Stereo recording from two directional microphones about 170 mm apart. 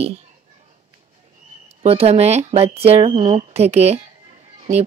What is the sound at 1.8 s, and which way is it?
Speech, 35° right (ahead or behind).